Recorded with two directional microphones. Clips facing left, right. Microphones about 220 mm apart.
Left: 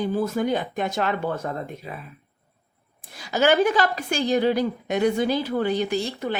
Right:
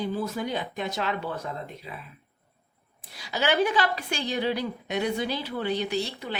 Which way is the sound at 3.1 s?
45° left (ahead or behind).